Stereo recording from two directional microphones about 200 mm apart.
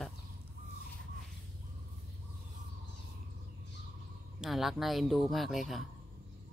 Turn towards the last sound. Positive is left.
turn(degrees=0)  # may be behind; listen again after turning